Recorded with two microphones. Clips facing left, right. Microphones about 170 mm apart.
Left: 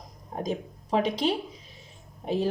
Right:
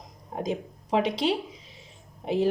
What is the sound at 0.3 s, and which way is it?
Speech, 20° right (ahead or behind).